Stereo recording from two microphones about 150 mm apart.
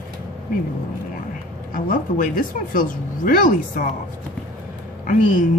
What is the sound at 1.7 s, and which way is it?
Speech, 65° left (ahead or behind).